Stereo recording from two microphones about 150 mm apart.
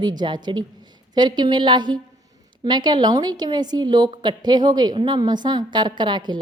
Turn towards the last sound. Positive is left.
turn(degrees=-30)  # may be behind; listen again after turning